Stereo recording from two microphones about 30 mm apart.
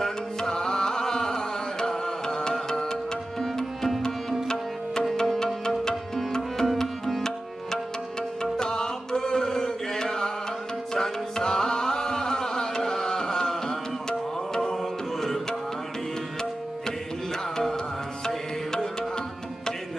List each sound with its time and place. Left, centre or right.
0.0 s music: centre
5.2 s music: centre
14.5 s tabla: centre
14.8 s music: centre
18.2 s music: centre